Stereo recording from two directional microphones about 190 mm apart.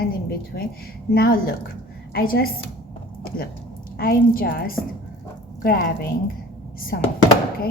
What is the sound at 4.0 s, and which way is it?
A woman's voice, 50° left (ahead or behind).